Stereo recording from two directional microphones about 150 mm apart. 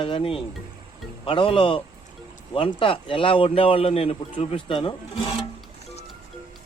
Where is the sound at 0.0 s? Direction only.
35° left (ahead or behind).